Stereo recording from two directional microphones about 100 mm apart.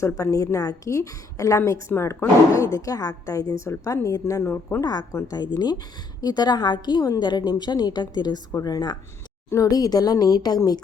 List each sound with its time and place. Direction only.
0.0 s a woman's voice: 30° left (ahead or behind)
4.8 s a woman's voice: 40° left (ahead or behind)